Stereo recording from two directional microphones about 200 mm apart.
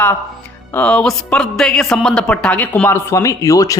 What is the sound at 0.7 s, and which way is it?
A woman's voice, 5° left (ahead or behind).